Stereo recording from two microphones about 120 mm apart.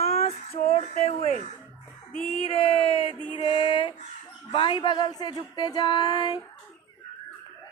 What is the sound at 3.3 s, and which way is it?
Music, 50° left (ahead or behind).